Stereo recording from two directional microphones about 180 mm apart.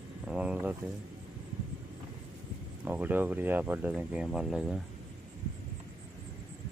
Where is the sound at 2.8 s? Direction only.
10° right (ahead or behind).